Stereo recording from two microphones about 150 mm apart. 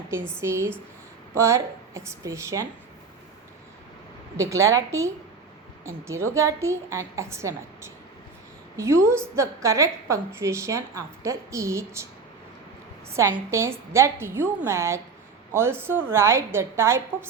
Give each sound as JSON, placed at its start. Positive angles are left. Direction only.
{"t": 0.1, "sound": "a woman's voice", "side_deg": -15}
{"t": 4.4, "sound": "a woman's voice", "side_deg": -20}
{"t": 13.1, "sound": "a woman's voice", "side_deg": -20}